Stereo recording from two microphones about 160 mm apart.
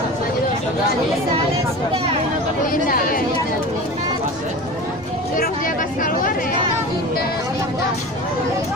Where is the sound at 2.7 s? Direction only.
60° left (ahead or behind).